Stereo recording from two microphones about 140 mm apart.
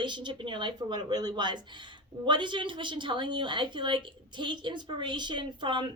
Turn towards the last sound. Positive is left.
turn(degrees=-35)  # may be behind; listen again after turning